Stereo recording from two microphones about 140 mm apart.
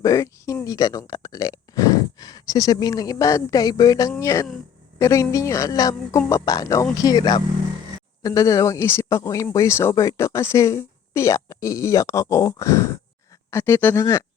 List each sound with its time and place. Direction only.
0.0 s speech: 25° left (ahead or behind)